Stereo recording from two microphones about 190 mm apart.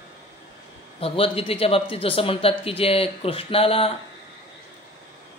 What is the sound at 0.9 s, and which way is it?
Speech, 30° left (ahead or behind).